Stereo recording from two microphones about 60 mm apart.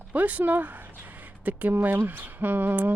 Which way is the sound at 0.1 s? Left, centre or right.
Right.